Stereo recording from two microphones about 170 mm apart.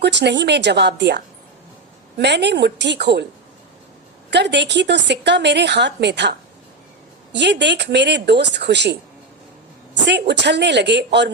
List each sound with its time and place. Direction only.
0.0 s a woman's voice: 90° right
4.3 s a woman's voice: 90° right
7.3 s a woman's voice: 90° right
10.1 s a woman's voice: 90° right